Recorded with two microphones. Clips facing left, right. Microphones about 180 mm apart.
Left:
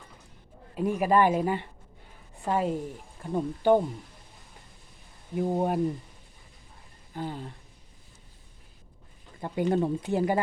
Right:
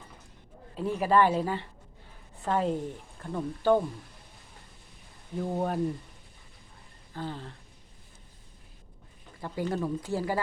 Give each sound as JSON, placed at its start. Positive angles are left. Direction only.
{"t": 0.8, "sound": "speech", "side_deg": 15}
{"t": 5.4, "sound": "speech", "side_deg": 15}
{"t": 7.1, "sound": "speech", "side_deg": 15}
{"t": 9.4, "sound": "speech", "side_deg": 20}